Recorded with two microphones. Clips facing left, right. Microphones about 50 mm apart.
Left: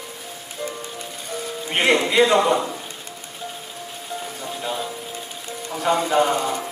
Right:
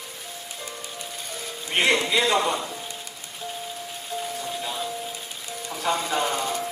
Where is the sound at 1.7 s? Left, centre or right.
Centre.